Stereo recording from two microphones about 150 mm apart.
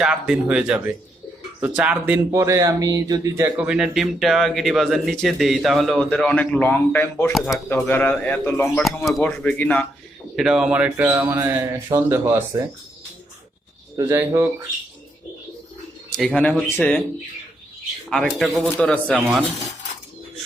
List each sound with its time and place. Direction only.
0.0 s speech: 5° right (ahead or behind)
2.3 s speech: 20° right (ahead or behind)
3.7 s speech: 5° right (ahead or behind); by 7.3 s 15° left (ahead or behind)
7.3 s speech: centre (ahead or behind)
7.7 s speech: 10° left (ahead or behind)
10.3 s speech: 5° right (ahead or behind)
13.9 s speech: 20° right (ahead or behind)
16.1 s speech: 5° left (ahead or behind)
18.1 s speech: centre (ahead or behind)